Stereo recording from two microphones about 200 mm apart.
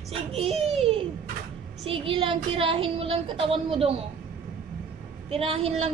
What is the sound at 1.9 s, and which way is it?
A woman's voice, 25° right (ahead or behind).